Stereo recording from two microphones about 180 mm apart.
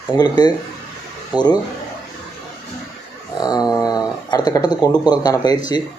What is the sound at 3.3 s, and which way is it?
Speech, 20° left (ahead or behind).